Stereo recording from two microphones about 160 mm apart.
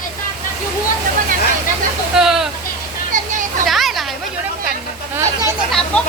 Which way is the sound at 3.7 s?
Centre (ahead or behind).